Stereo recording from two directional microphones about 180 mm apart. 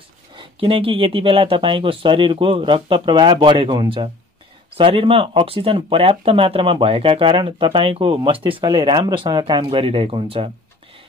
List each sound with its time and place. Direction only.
0.4 s speech: 30° right (ahead or behind)